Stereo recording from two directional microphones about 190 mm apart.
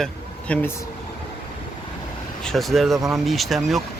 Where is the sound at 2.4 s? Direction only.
Centre (ahead or behind).